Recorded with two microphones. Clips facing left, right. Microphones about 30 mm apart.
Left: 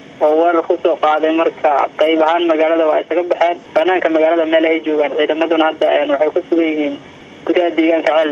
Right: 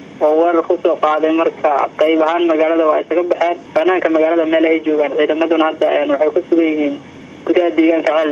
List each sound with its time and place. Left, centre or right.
0.2 s speech: centre